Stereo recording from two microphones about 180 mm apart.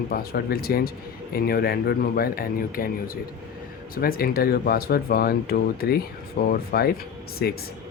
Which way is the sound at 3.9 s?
55° left (ahead or behind).